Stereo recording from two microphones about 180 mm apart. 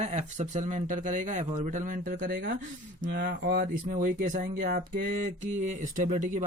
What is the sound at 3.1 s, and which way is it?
Speech, 60° right (ahead or behind).